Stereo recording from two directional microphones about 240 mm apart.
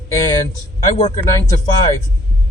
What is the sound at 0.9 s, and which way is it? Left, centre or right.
Speech, left.